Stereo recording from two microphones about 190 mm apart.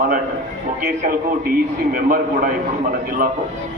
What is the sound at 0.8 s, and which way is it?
A man's voice, 50° right (ahead or behind).